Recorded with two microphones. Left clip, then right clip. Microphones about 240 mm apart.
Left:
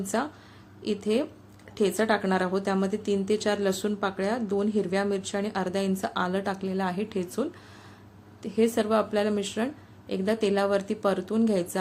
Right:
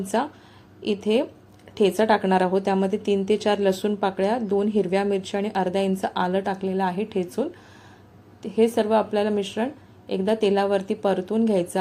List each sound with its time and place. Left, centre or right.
0.1 s a woman's voice: centre